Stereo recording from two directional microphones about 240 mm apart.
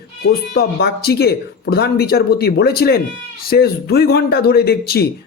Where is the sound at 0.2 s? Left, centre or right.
Left.